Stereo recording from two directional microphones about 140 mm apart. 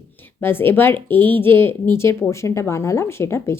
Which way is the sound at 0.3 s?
15° left (ahead or behind).